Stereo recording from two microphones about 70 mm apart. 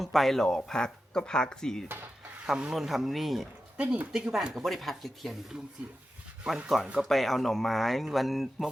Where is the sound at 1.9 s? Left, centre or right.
Right.